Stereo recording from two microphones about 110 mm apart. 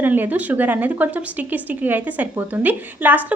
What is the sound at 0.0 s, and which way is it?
A woman's voice, 15° right (ahead or behind).